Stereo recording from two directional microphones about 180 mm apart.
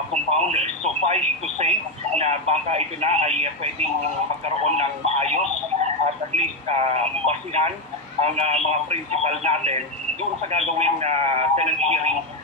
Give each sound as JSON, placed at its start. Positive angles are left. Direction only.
{"t": 0.1, "sound": "speech", "side_deg": -35}